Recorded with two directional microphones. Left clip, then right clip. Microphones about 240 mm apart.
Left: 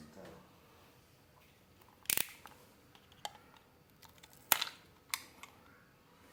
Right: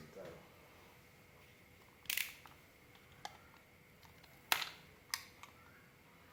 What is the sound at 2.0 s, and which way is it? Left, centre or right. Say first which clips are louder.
Camera: left 2 dB; left.